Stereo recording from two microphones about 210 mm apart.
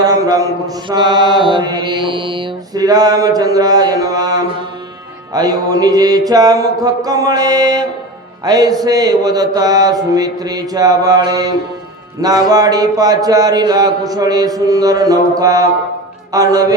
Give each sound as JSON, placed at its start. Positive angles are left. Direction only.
{"t": 0.0, "sound": "mantra", "side_deg": -15}